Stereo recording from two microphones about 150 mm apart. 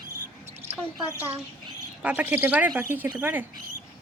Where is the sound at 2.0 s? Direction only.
10° right (ahead or behind).